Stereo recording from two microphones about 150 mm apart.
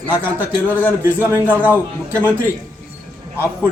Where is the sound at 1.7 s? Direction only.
10° left (ahead or behind).